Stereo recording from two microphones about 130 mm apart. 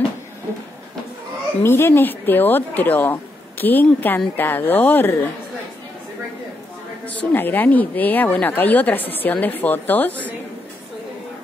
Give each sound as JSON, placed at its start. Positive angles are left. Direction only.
{"t": 1.6, "sound": "a woman's voice", "side_deg": 20}
{"t": 7.1, "sound": "a woman's voice", "side_deg": 15}